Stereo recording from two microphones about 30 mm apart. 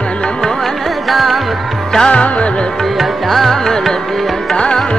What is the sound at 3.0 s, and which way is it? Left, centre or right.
Music, centre.